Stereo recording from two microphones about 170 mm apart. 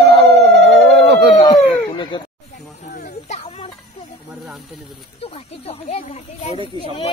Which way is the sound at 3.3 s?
40° left (ahead or behind).